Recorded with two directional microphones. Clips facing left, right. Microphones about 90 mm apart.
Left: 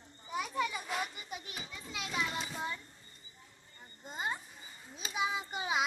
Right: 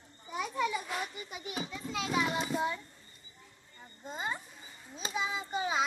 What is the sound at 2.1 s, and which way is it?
Children playing, 70° right (ahead or behind).